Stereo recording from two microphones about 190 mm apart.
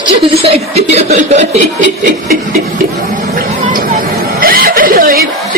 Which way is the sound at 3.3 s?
45° right (ahead or behind).